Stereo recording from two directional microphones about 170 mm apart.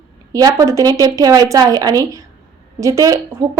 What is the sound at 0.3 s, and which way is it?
A woman's voice, 20° right (ahead or behind).